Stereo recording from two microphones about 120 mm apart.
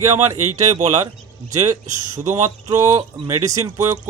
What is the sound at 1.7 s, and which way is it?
Speech, 30° right (ahead or behind).